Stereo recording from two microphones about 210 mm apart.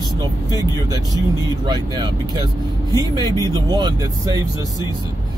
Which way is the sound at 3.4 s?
20° right (ahead or behind).